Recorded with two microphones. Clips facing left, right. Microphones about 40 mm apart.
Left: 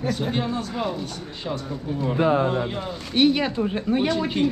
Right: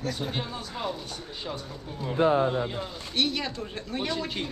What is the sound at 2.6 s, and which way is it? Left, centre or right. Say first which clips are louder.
Speech: left 4 dB; left.